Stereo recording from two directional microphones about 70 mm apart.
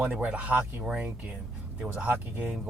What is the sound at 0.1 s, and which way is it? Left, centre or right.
Speech, centre.